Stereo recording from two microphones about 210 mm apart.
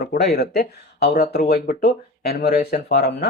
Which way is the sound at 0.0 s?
50° left (ahead or behind).